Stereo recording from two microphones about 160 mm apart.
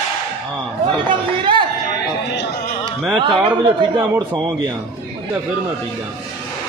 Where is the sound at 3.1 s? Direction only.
30° right (ahead or behind).